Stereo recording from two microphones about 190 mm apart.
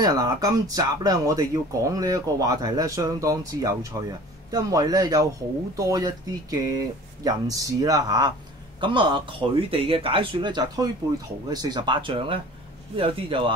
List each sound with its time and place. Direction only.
0.0 s speech: 20° right (ahead or behind)